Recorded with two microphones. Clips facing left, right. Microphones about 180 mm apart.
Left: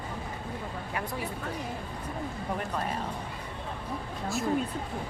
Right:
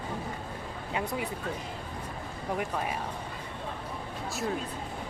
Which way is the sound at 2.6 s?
10° right (ahead or behind).